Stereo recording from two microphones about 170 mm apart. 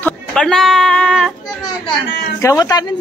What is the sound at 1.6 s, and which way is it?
A child's voice, 25° left (ahead or behind).